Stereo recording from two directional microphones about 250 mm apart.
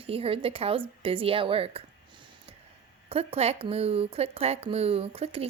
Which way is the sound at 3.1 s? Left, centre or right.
Right.